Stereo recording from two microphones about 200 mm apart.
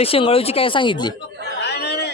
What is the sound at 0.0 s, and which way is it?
Speech, 30° left (ahead or behind).